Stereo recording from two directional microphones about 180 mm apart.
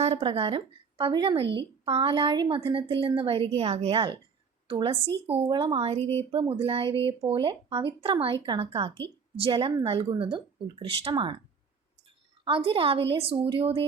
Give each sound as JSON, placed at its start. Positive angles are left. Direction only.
{"t": 0.0, "sound": "a woman's voice", "side_deg": -35}
{"t": 12.5, "sound": "a woman's voice", "side_deg": -30}